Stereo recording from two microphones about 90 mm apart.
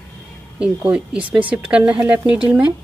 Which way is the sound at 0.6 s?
15° right (ahead or behind).